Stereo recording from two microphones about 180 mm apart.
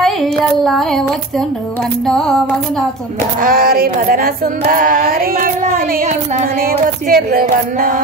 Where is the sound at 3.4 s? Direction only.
55° right (ahead or behind).